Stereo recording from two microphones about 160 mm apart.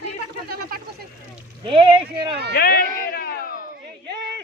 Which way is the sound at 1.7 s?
35° right (ahead or behind).